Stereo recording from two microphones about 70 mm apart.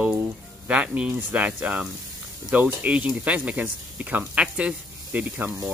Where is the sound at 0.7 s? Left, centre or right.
Centre.